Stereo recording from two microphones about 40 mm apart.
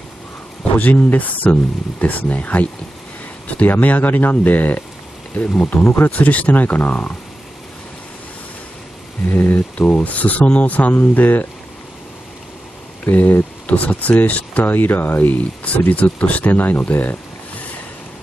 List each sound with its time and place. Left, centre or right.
0.7 s speech: left
9.3 s speech: left
9.8 s speech: left
13.0 s speech: left
14.7 s speech: left